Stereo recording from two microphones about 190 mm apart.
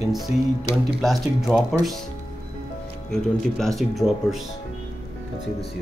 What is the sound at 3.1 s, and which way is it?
Speech, centre (ahead or behind).